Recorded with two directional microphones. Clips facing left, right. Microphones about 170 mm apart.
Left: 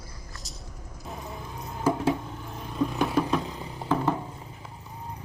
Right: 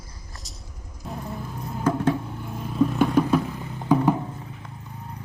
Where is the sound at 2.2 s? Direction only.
5° right (ahead or behind).